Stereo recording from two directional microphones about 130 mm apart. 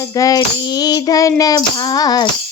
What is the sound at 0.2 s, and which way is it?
Child singing, 30° left (ahead or behind).